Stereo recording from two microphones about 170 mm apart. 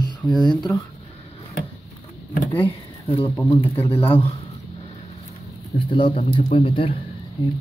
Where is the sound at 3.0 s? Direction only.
35° left (ahead or behind).